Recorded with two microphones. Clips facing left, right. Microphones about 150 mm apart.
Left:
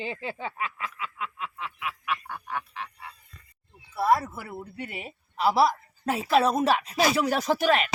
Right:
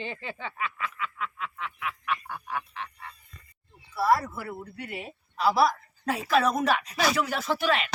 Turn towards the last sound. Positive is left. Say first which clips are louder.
# left 4 dB
turn(degrees=40)  # may be behind; listen again after turning